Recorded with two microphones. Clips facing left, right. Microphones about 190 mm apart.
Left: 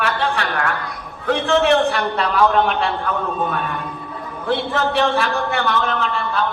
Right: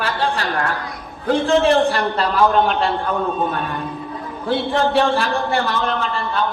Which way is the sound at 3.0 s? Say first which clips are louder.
Right 2 dB; 30° right (ahead or behind).